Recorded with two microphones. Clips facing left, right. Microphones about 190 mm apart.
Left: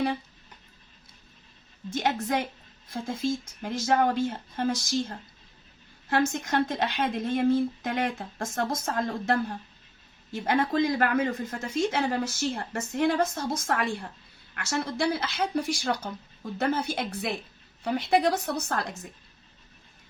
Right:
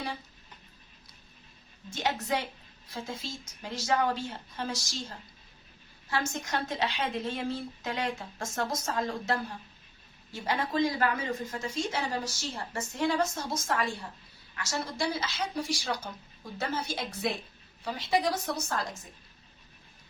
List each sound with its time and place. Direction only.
1.9 s speech: 50° left (ahead or behind)